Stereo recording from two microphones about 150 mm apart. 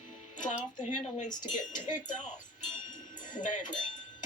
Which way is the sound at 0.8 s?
55° left (ahead or behind).